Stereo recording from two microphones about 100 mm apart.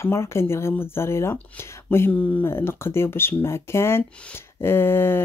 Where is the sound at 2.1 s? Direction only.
15° left (ahead or behind).